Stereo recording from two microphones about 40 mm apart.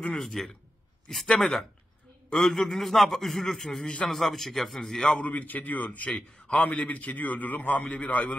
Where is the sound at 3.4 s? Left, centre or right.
Centre.